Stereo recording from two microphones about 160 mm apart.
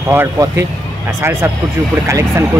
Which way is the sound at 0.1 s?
15° right (ahead or behind).